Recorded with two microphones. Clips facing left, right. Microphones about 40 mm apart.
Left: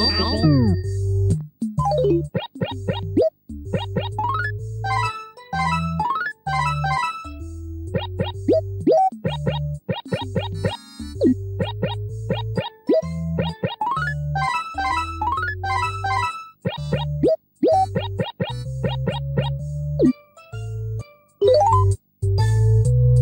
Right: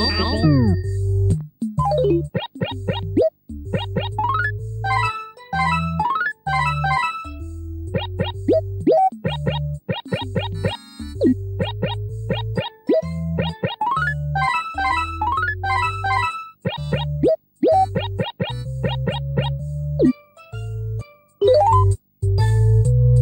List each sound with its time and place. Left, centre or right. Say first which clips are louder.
0.0 s music: even; right
21.4 s music: right 1 dB; right